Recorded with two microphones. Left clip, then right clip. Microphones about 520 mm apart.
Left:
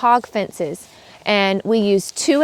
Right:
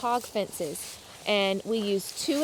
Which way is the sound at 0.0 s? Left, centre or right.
Left.